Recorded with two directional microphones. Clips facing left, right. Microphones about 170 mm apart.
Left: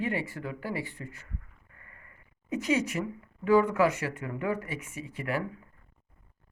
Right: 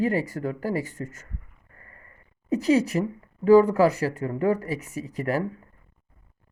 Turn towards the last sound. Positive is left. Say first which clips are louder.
# right 6 dB
turn(degrees=-40)  # may be behind; listen again after turning